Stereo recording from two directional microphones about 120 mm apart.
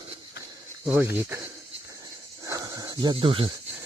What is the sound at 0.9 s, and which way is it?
Speech, 15° right (ahead or behind).